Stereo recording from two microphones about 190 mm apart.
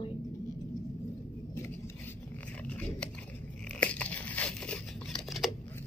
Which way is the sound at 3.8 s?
5° left (ahead or behind).